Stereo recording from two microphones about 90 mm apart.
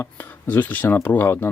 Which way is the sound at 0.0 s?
20° left (ahead or behind).